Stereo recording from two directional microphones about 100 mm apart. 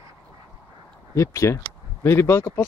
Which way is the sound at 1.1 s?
30° left (ahead or behind).